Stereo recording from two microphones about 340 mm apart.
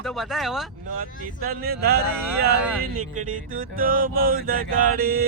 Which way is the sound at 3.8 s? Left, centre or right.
Right.